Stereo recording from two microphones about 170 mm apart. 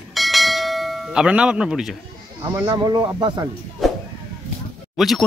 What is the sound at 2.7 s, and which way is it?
Speech, 25° right (ahead or behind).